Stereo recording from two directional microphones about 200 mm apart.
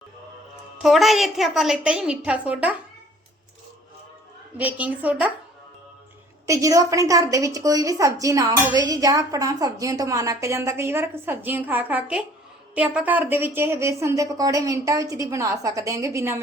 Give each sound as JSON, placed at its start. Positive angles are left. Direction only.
{"t": 0.8, "sound": "a woman's voice", "side_deg": 0}
{"t": 4.5, "sound": "a woman's voice", "side_deg": -5}
{"t": 6.4, "sound": "a woman's voice", "side_deg": -15}